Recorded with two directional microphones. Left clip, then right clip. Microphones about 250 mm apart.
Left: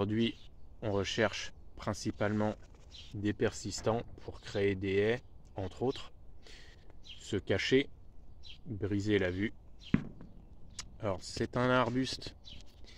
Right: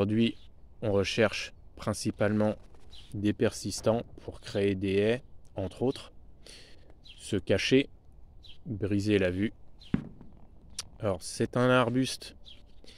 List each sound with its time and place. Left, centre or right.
0.0 s speech: right